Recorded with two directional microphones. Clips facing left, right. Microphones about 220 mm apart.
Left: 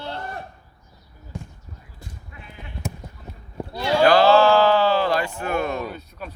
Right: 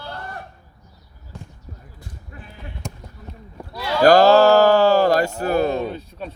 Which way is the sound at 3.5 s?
25° left (ahead or behind).